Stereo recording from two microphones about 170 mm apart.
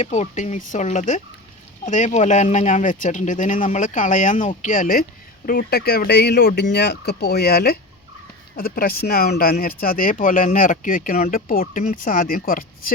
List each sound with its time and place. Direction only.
0.0 s speech: 40° left (ahead or behind)
5.5 s speech: 65° left (ahead or behind)